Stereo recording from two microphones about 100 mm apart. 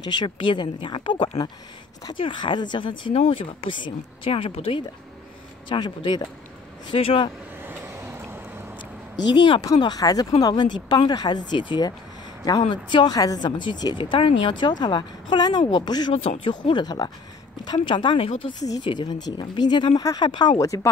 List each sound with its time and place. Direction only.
0.0 s speech: 50° left (ahead or behind); by 4.8 s 70° left (ahead or behind)
5.7 s speech: 45° left (ahead or behind)
6.9 s speech: 65° left (ahead or behind)
7.6 s vehicle: 25° right (ahead or behind)
9.6 s speech: 45° left (ahead or behind)
10.4 s speech: 50° left (ahead or behind)
16.1 s speech: 70° left (ahead or behind); by 17.1 s 45° left (ahead or behind)
17.7 s speech: 55° left (ahead or behind)
18.7 s speech: 50° left (ahead or behind)
20.0 s speech: 35° left (ahead or behind)
20.2 s speech: 45° left (ahead or behind)
20.5 s speech: 35° left (ahead or behind)